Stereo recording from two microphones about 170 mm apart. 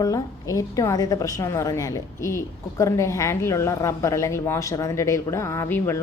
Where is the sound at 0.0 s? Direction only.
20° left (ahead or behind).